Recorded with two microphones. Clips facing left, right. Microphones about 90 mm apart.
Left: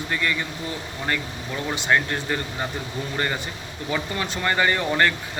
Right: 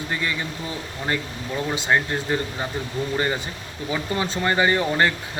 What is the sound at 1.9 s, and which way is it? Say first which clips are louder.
Speech: even; 20° right (ahead or behind).